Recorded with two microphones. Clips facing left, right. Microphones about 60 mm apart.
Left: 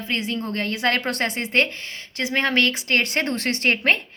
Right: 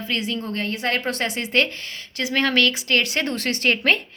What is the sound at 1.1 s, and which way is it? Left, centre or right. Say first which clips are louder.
Speech: even; left.